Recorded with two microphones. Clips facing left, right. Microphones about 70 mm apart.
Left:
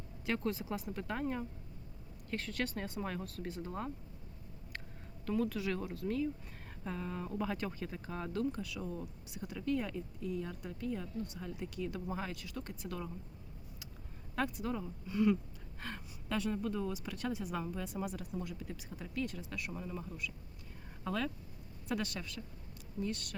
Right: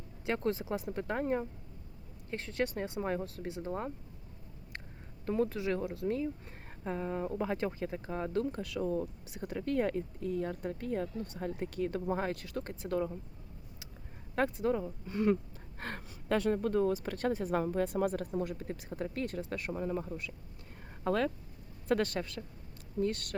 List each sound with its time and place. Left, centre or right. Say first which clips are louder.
0.3 s speech: right 4 dB; right
0.6 s speech: right 4 dB; right
5.2 s speech: right 3 dB; right
8.3 s speech: right 1 dB; right
14.3 s speech: right 6 dB; right
15.8 s speech: right 4 dB; right